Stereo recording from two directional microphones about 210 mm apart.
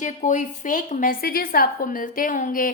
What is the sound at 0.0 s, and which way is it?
A woman's voice, 35° left (ahead or behind).